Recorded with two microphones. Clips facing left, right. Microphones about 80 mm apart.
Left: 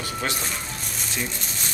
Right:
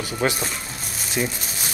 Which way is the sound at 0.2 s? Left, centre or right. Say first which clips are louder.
Right 7 dB; centre.